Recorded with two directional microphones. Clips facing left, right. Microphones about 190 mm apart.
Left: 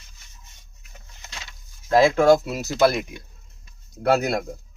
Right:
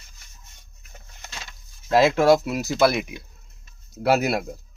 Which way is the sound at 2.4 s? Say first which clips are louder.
Even; centre (ahead or behind).